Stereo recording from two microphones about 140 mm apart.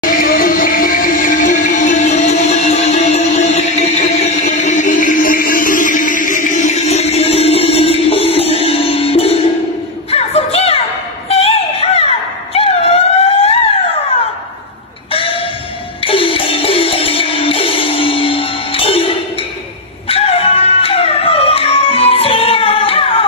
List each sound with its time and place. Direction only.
0.0 s music: 85° left; by 12.1 s 45° left (ahead or behind)
12.5 s a sound: 45° left (ahead or behind)
16.0 s music: 40° left (ahead or behind)